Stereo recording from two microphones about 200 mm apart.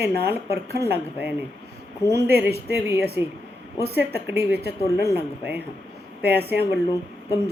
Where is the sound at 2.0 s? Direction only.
15° left (ahead or behind).